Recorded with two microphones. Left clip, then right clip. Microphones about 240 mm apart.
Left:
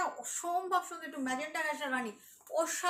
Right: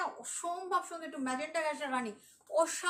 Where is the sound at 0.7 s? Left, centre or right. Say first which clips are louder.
Left 1 dB; centre.